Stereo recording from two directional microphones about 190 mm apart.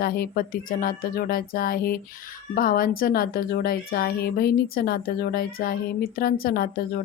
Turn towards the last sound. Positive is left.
turn(degrees=55)  # may be behind; listen again after turning